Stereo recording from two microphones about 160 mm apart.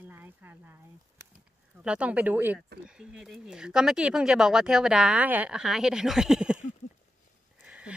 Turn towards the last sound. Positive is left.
turn(degrees=-5)  # may be behind; listen again after turning